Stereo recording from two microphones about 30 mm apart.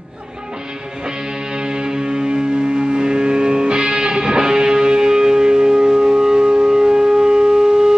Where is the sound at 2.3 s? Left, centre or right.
Right.